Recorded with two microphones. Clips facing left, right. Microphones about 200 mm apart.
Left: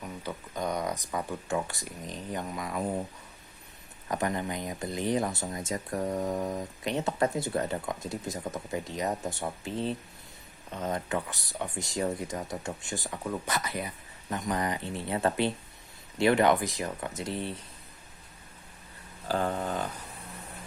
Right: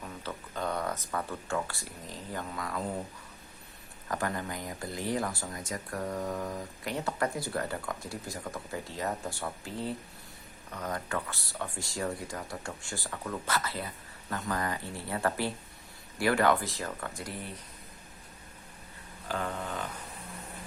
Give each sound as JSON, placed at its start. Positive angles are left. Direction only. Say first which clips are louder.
{"t": 0.0, "sound": "speech", "louder": "left 2 dB", "side_deg": 15}
{"t": 4.1, "sound": "speech", "louder": "left 3 dB", "side_deg": 20}
{"t": 19.3, "sound": "a sound", "louder": "left 5 dB", "side_deg": 35}